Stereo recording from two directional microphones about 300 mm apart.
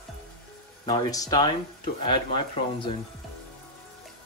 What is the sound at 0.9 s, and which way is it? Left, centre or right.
Speech, centre.